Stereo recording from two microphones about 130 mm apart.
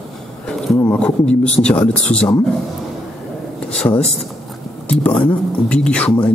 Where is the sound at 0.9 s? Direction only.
10° left (ahead or behind).